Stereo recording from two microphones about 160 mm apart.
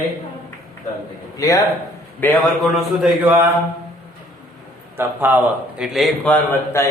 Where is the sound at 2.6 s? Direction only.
Centre (ahead or behind).